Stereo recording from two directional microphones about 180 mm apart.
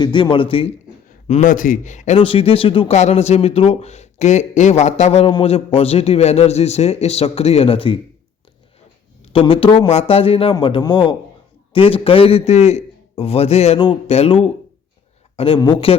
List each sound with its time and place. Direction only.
0.0 s a man's voice: 25° left (ahead or behind)
1.3 s a man's voice: 45° left (ahead or behind)
2.1 s speech: 30° left (ahead or behind)
9.3 s a man's voice: 30° left (ahead or behind)